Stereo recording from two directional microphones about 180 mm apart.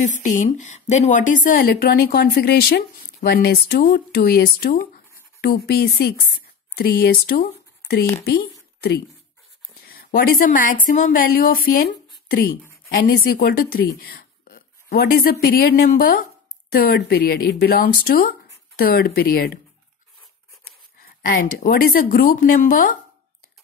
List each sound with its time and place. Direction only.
0.2 s speech: 45° left (ahead or behind)
9.8 s a woman's voice: 55° left (ahead or behind)
13.9 s a sound: 55° left (ahead or behind)
15.4 s speech: 55° left (ahead or behind)
21.0 s speech: 55° left (ahead or behind)